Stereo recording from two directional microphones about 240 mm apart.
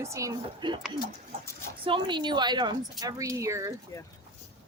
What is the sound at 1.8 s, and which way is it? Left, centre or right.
Speech, right.